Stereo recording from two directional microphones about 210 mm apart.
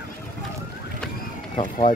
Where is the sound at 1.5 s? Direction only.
35° left (ahead or behind).